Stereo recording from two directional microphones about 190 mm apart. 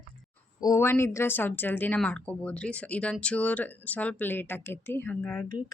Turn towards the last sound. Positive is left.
turn(degrees=5)  # may be behind; listen again after turning